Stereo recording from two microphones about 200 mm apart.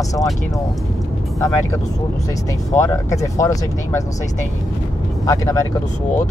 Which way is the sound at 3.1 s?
15° left (ahead or behind).